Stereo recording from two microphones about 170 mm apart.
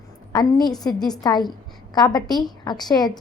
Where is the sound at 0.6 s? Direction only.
25° left (ahead or behind).